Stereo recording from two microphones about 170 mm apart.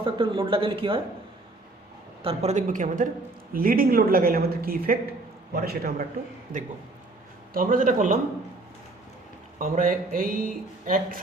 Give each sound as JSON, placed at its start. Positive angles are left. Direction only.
{"t": 0.0, "sound": "speech", "side_deg": -30}
{"t": 2.2, "sound": "a woman's voice", "side_deg": -40}
{"t": 7.5, "sound": "a woman's voice", "side_deg": -55}
{"t": 9.6, "sound": "a woman's voice", "side_deg": -50}